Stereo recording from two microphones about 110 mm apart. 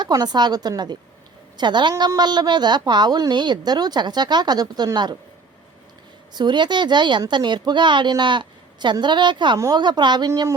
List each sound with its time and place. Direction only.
0.0 s a woman's voice: 40° right (ahead or behind)
6.3 s a woman's voice: 45° right (ahead or behind)